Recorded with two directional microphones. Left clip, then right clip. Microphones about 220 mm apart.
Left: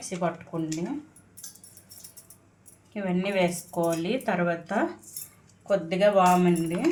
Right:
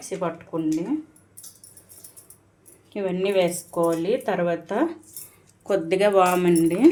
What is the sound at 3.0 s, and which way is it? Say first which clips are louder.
Speech: right 5 dB; 35° right (ahead or behind).